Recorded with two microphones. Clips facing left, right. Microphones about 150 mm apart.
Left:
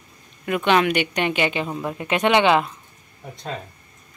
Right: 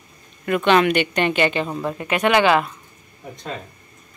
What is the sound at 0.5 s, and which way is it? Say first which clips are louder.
A woman's voice: right 2 dB; 10° left (ahead or behind).